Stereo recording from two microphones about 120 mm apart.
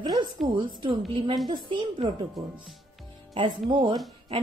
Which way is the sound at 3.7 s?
45° right (ahead or behind).